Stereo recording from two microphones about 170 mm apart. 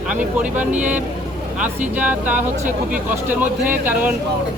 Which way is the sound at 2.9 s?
10° right (ahead or behind).